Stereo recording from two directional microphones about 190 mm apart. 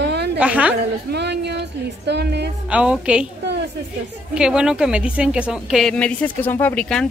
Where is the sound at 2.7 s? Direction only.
5° right (ahead or behind).